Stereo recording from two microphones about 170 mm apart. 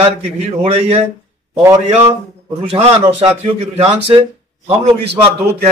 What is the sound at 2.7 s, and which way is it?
Speech, 35° right (ahead or behind).